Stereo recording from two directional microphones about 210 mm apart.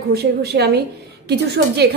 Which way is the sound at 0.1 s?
50° right (ahead or behind).